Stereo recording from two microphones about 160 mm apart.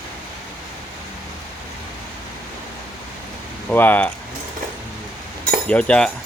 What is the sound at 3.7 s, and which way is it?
Speech, 10° left (ahead or behind).